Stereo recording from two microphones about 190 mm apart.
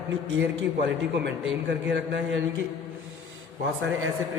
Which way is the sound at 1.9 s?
65° right (ahead or behind).